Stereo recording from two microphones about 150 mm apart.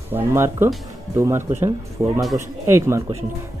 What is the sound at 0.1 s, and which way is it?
A man's voice, 15° right (ahead or behind).